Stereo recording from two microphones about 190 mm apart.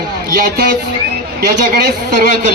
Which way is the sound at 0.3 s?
50° right (ahead or behind).